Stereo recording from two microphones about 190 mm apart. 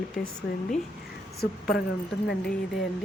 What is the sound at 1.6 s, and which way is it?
Speech, 60° left (ahead or behind).